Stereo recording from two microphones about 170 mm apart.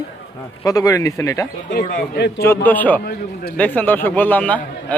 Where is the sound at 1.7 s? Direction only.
50° left (ahead or behind).